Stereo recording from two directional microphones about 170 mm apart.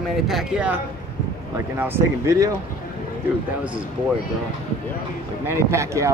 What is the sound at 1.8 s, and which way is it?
Speech, 15° right (ahead or behind).